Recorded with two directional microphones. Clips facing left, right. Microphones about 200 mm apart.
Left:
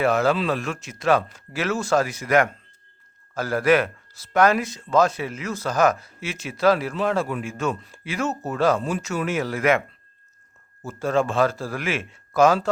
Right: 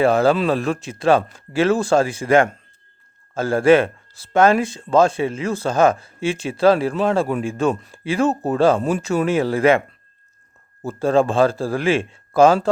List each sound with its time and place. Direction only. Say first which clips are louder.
0.0 s a man's voice: right 5 dB; 30° right (ahead or behind)
10.8 s a man's voice: right 5 dB; 30° right (ahead or behind)